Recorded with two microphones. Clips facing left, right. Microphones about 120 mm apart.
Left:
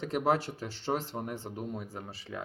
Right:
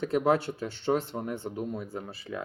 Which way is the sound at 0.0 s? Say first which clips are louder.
Right 4 dB; 35° left (ahead or behind).